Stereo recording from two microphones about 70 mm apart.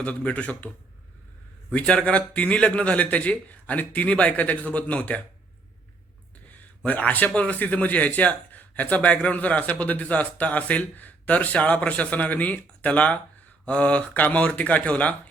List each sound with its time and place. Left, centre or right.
0.0 s a man's voice: centre
1.7 s a man's voice: centre
6.8 s a man's voice: left